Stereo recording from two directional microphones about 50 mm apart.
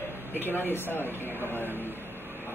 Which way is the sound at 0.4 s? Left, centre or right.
Left.